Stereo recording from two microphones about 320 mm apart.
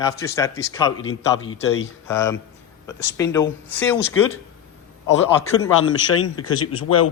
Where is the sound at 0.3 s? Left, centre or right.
Centre.